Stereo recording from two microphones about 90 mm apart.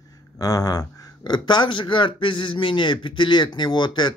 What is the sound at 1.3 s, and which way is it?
Speech, 60° left (ahead or behind).